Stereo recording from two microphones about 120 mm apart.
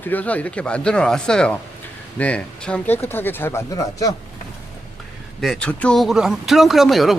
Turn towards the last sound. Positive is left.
turn(degrees=0)  # may be behind; listen again after turning